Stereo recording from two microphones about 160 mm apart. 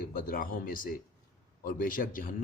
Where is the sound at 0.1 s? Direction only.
60° left (ahead or behind).